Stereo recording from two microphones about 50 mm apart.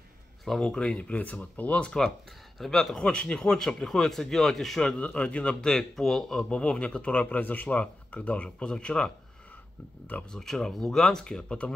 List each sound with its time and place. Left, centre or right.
0.6 s speech: centre
2.6 s speech: centre
3.0 s speech: left
4.9 s speech: left
5.7 s speech: centre
6.5 s speech: centre
10.3 s speech: centre